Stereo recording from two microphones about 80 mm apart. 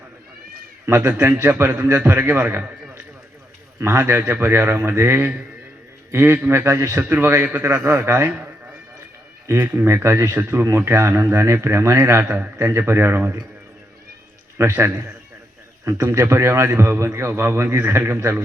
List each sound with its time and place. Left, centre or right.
0.9 s a man's voice: right
14.6 s speech: right